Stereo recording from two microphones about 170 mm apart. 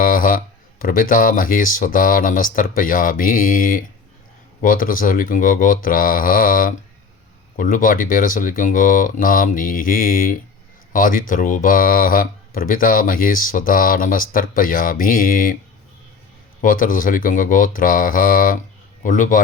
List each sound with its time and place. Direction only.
0.0 s speech: 50° left (ahead or behind)
16.6 s speech: 50° left (ahead or behind)